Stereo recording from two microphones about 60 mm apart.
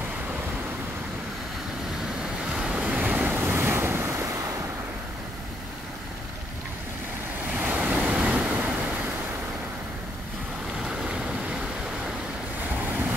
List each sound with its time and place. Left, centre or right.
2.5 s waves: centre
3.3 s waves: right
7.6 s vehicle: right
8.1 s vehicle: centre
8.4 s vehicle: right
10.8 s vehicle: centre
12.7 s vehicle: right